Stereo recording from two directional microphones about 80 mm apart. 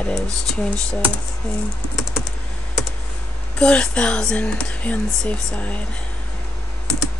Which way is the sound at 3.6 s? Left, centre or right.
Centre.